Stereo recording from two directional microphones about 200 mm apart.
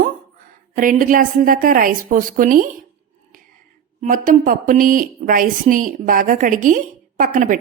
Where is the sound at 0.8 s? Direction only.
40° right (ahead or behind).